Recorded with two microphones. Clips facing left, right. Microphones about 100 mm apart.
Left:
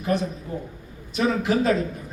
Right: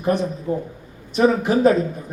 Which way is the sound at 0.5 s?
30° right (ahead or behind).